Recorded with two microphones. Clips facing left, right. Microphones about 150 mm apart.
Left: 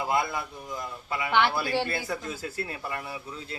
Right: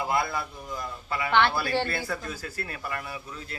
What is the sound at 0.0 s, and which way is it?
A man's voice, 20° left (ahead or behind).